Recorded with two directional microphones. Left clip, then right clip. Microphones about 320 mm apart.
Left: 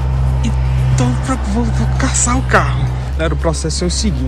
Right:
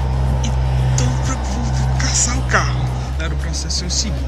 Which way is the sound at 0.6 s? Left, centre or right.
Right.